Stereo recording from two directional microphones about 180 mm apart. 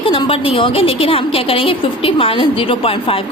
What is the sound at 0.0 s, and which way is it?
A woman's voice, 30° left (ahead or behind).